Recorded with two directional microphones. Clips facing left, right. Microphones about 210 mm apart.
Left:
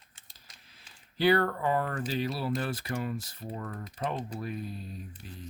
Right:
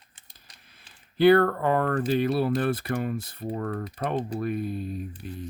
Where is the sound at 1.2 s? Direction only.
55° right (ahead or behind).